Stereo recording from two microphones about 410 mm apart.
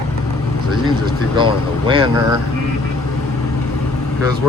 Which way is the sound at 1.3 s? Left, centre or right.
Centre.